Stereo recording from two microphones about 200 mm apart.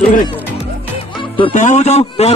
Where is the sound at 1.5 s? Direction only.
40° left (ahead or behind).